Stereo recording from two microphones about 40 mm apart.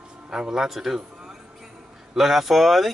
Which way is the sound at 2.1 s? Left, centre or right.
Centre.